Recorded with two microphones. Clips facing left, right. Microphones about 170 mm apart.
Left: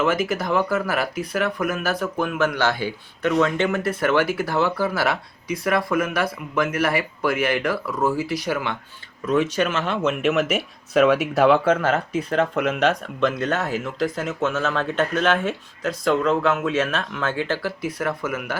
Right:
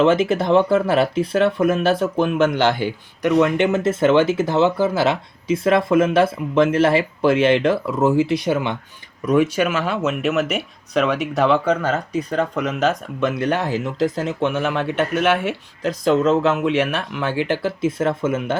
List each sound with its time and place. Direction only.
0.0 s speech: 25° right (ahead or behind)
9.2 s speech: 10° right (ahead or behind)
13.2 s speech: 10° right (ahead or behind)
16.0 s speech: 25° right (ahead or behind)